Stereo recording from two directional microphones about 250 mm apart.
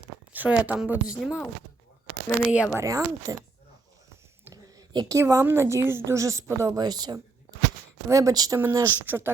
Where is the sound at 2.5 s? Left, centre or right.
Centre.